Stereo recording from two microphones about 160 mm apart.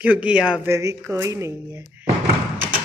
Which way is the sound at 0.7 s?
15° right (ahead or behind).